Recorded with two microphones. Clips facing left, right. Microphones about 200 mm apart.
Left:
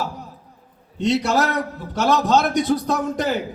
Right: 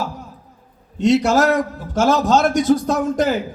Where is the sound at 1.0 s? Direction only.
45° right (ahead or behind).